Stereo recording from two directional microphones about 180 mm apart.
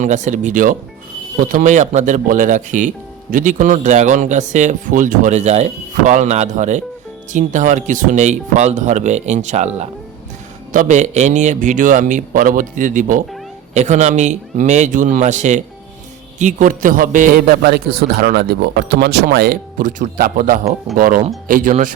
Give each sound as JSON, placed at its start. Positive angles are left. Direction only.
{"t": 0.0, "sound": "a man's voice", "side_deg": -40}